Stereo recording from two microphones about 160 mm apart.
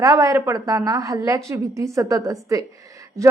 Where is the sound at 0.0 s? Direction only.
20° right (ahead or behind).